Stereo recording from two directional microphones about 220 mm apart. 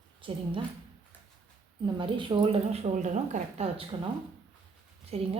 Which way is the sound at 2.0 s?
20° right (ahead or behind).